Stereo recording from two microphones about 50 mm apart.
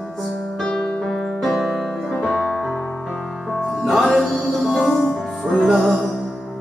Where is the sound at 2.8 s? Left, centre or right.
Centre.